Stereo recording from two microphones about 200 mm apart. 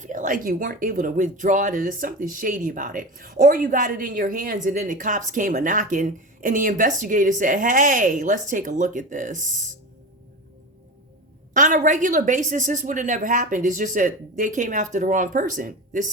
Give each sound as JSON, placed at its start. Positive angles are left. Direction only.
{"t": 0.0, "sound": "speech", "side_deg": -40}
{"t": 11.5, "sound": "speech", "side_deg": -40}